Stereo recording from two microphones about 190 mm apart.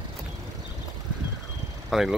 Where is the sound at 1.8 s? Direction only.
Centre (ahead or behind).